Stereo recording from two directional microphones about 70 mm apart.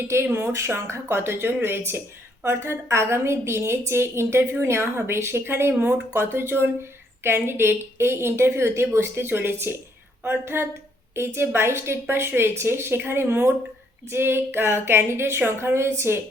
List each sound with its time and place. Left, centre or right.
0.1 s a woman's voice: right